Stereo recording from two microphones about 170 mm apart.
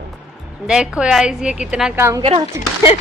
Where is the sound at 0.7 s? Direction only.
5° right (ahead or behind).